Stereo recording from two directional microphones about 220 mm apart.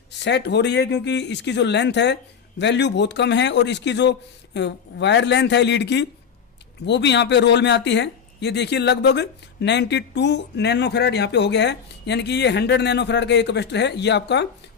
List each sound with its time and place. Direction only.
0.3 s speech: 50° left (ahead or behind)